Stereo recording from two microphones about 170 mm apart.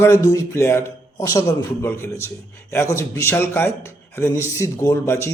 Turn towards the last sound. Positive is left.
turn(degrees=15)  # may be behind; listen again after turning